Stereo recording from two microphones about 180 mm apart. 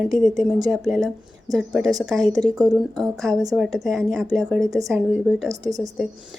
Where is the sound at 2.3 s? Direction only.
20° right (ahead or behind).